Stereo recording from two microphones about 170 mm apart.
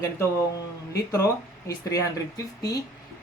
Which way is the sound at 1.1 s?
20° left (ahead or behind).